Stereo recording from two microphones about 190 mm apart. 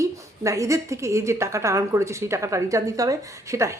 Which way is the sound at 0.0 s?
15° right (ahead or behind).